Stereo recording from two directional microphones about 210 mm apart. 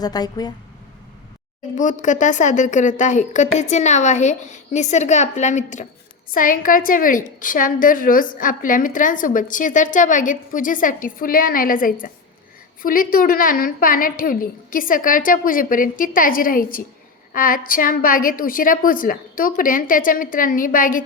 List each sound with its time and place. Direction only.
0.0 s a woman's voice: 20° left (ahead or behind)
1.7 s a woman's voice: 35° left (ahead or behind)